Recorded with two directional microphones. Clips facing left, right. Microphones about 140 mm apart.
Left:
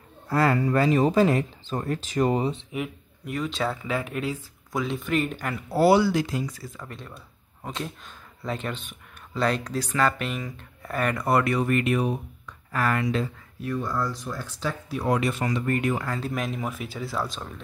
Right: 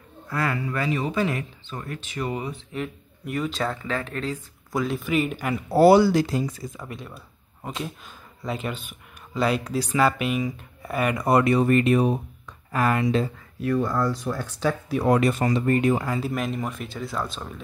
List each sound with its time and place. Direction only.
0.3 s speech: 35° left (ahead or behind)
2.7 s speech: 10° left (ahead or behind)
3.3 s speech: centre (ahead or behind)
4.7 s speech: centre (ahead or behind)
5.7 s speech: 40° right (ahead or behind); by 6.7 s 25° right (ahead or behind)
6.8 s speech: 5° right (ahead or behind); by 12.2 s 30° right (ahead or behind)
12.7 s speech: 20° right (ahead or behind)
13.6 s speech: 90° right
13.8 s speech: 55° right (ahead or behind); by 16.1 s 25° right (ahead or behind)
16.1 s speech: 5° right (ahead or behind)